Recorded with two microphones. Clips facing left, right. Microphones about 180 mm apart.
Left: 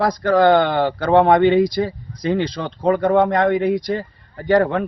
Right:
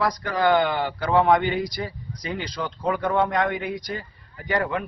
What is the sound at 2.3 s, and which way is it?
Speech, 70° left (ahead or behind).